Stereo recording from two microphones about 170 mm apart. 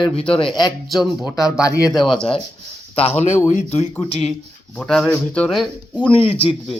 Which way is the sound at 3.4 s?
40° left (ahead or behind).